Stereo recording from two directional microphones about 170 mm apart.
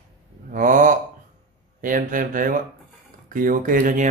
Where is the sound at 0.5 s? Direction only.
50° right (ahead or behind).